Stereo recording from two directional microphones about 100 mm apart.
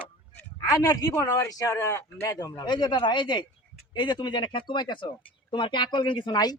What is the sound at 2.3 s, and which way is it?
Speech, 40° left (ahead or behind).